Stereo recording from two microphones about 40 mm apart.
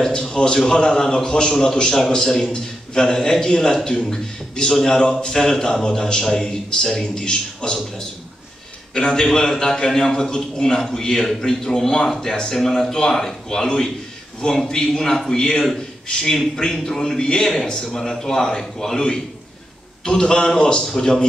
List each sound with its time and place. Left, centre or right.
0.0 s a man's voice: centre
8.9 s a man's voice: centre